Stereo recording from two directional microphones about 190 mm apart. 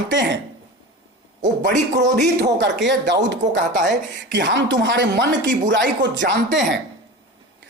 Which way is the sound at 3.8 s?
65° right (ahead or behind).